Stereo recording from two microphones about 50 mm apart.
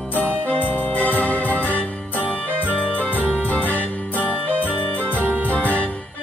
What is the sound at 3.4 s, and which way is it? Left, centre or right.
Jingle bell, left.